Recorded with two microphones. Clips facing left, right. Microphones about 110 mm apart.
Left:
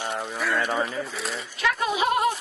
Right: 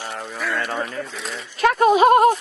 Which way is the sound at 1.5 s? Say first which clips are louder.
Right 10 dB; 50° right (ahead or behind).